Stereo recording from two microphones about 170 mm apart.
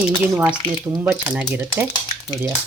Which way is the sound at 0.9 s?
10° right (ahead or behind).